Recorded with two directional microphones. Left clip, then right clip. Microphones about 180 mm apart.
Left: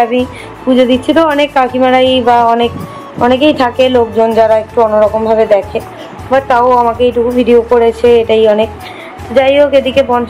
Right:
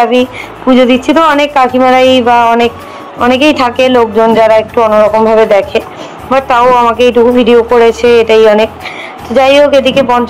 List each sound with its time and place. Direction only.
0.0 s speech: 10° right (ahead or behind)
4.7 s speech: 25° right (ahead or behind)